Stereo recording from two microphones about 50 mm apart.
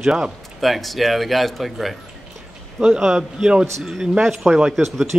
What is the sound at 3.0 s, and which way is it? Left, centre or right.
Speech, centre.